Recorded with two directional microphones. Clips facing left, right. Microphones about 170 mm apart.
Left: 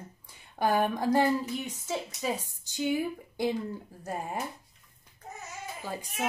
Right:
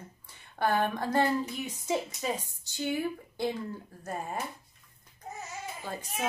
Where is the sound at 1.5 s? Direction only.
10° right (ahead or behind).